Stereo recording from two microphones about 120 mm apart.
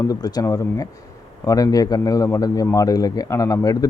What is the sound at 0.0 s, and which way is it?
A man's voice, 35° left (ahead or behind).